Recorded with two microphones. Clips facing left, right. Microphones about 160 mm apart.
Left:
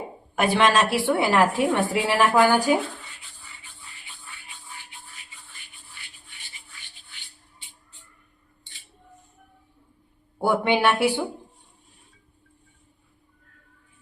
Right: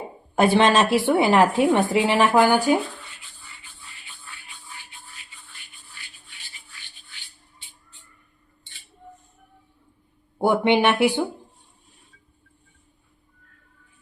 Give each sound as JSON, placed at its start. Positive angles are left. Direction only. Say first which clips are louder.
{"t": 0.3, "sound": "a woman's voice", "louder": "right 3 dB", "side_deg": -30}
{"t": 10.3, "sound": "a woman's voice", "louder": "right 3 dB", "side_deg": -20}